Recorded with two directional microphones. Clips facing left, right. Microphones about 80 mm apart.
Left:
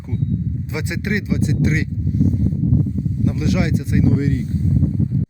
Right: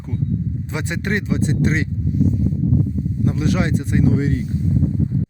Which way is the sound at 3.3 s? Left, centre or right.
Right.